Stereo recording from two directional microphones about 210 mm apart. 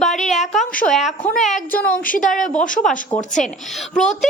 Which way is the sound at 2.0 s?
40° left (ahead or behind).